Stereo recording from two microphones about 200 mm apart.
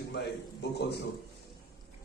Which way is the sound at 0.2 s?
60° left (ahead or behind).